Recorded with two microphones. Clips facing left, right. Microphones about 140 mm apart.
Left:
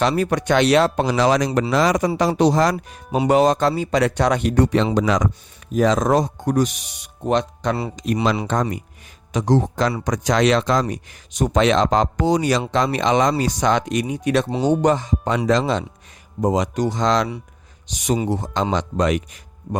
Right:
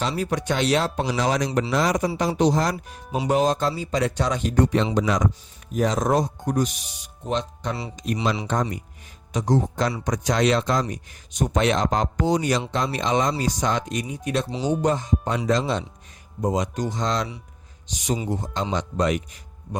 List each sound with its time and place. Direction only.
0.0 s speech: 70° left (ahead or behind); by 19.2 s 90° left